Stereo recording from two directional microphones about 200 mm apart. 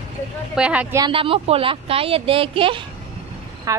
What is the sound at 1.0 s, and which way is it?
Speech, 25° right (ahead or behind).